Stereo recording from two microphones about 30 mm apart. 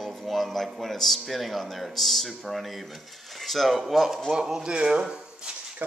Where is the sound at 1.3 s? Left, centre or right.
Centre.